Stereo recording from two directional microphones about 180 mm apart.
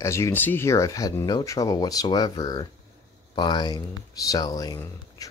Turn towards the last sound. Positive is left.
turn(degrees=20)  # may be behind; listen again after turning